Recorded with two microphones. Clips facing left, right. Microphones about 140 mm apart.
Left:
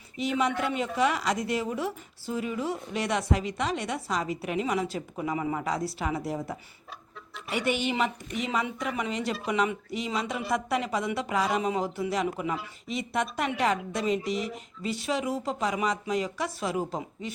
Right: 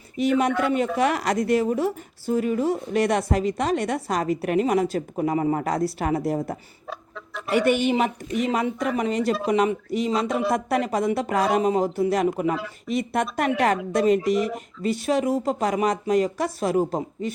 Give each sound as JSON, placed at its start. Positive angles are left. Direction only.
{"t": 0.2, "sound": "a woman's voice", "side_deg": -55}